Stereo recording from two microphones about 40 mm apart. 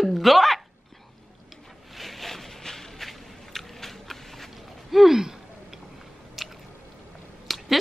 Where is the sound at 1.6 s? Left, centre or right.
Centre.